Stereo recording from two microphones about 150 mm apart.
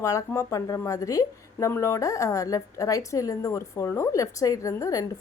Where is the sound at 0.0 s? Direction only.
20° left (ahead or behind).